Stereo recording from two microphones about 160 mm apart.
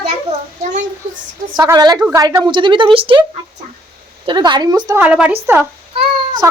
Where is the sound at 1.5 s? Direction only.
25° right (ahead or behind).